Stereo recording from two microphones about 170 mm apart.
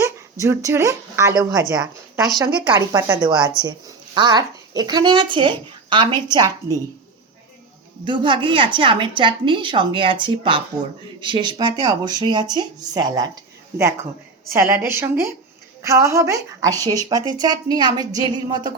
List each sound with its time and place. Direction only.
0.0 s a woman's voice: 15° right (ahead or behind)
8.0 s speech: 30° right (ahead or behind)
14.5 s a woman's voice: 15° right (ahead or behind)